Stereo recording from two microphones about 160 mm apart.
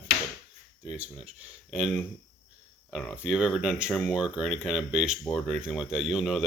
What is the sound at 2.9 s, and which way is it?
Speech, centre (ahead or behind).